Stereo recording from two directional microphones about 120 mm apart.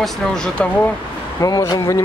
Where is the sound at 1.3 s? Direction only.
30° left (ahead or behind).